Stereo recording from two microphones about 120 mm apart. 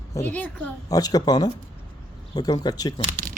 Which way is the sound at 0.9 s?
30° left (ahead or behind).